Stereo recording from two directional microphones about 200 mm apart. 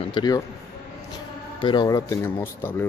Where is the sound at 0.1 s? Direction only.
20° left (ahead or behind).